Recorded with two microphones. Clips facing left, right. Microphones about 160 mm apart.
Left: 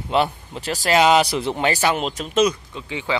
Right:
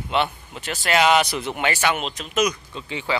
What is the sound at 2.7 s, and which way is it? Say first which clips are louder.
Speech: left 1 dB; 15° left (ahead or behind).